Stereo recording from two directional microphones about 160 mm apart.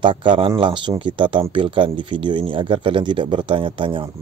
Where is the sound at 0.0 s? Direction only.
30° right (ahead or behind).